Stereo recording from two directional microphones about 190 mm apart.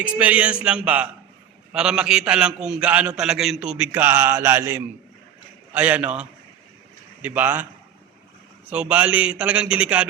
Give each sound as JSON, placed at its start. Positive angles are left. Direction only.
{"t": 0.0, "sound": "a man's voice", "side_deg": -5}
{"t": 8.7, "sound": "a man's voice", "side_deg": -10}